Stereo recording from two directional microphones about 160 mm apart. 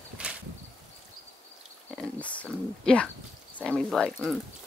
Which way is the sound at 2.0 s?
10° left (ahead or behind).